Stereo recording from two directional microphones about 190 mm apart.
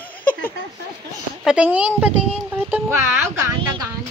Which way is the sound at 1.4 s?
5° right (ahead or behind).